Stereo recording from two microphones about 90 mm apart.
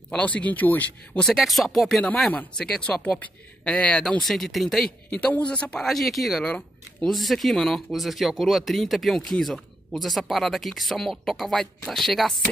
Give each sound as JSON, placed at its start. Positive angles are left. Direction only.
{"t": 0.1, "sound": "a man's voice", "side_deg": 15}
{"t": 1.2, "sound": "a man's voice", "side_deg": 0}
{"t": 5.9, "sound": "speech", "side_deg": 0}